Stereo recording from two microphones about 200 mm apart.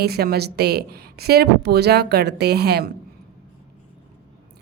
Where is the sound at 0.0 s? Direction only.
50° right (ahead or behind).